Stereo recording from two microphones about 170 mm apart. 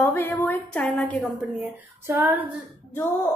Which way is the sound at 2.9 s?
15° left (ahead or behind).